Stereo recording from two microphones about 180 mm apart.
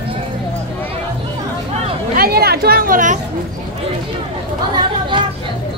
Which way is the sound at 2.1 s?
55° right (ahead or behind).